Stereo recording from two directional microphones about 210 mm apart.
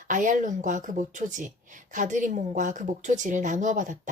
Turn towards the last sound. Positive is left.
turn(degrees=-35)  # may be behind; listen again after turning